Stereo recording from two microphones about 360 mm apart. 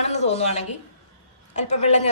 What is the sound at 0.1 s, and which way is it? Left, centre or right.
A woman's voice, centre.